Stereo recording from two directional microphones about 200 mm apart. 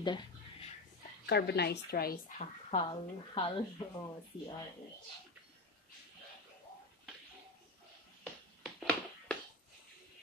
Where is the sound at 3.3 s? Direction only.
25° left (ahead or behind).